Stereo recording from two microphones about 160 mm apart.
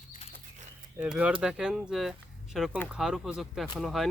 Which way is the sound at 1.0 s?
5° right (ahead or behind).